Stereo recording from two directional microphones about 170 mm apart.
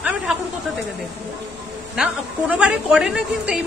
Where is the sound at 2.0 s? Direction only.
5° right (ahead or behind).